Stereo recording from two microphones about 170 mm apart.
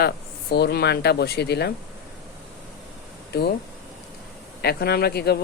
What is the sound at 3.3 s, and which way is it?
Speech, 65° left (ahead or behind).